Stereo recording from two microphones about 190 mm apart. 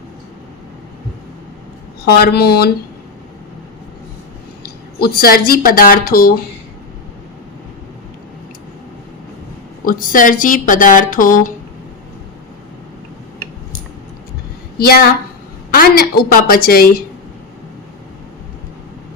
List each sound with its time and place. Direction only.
2.0 s speech: 55° left (ahead or behind)
4.9 s a woman's voice: 55° left (ahead or behind)
9.8 s a woman's voice: 45° left (ahead or behind)
14.8 s a woman's voice: 55° left (ahead or behind)